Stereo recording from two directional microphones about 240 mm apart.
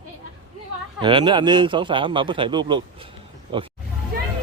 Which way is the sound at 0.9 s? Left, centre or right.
Centre.